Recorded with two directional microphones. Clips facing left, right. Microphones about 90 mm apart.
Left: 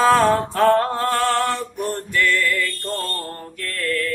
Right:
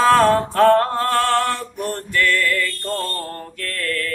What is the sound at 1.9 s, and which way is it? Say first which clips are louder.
Music: right 1 dB; 15° left (ahead or behind).